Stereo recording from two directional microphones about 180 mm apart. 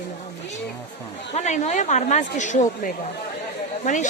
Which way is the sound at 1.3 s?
40° left (ahead or behind).